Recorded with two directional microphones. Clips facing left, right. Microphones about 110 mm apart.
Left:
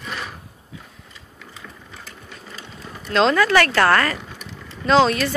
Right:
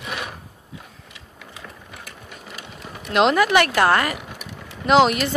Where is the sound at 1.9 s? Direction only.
10° right (ahead or behind).